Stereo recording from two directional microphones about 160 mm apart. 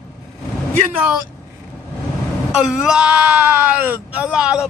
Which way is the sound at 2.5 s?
5° right (ahead or behind).